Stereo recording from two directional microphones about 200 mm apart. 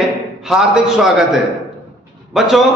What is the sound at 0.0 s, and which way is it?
A man's voice, centre (ahead or behind).